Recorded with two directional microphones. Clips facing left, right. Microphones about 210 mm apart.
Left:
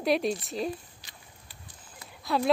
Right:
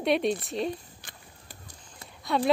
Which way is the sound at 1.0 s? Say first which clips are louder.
Right 3 dB; 50° right (ahead or behind).